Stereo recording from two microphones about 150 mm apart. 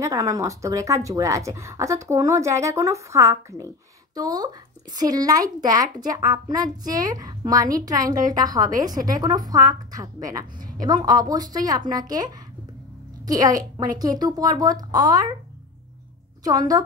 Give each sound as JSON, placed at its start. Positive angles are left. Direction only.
{"t": 0.0, "sound": "a woman's voice", "side_deg": -20}
{"t": 16.4, "sound": "a woman's voice", "side_deg": -25}